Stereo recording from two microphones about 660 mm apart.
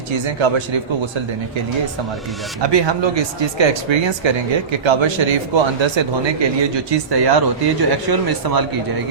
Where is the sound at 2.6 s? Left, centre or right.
Right.